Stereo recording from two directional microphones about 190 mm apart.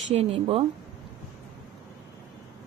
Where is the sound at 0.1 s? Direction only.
30° right (ahead or behind).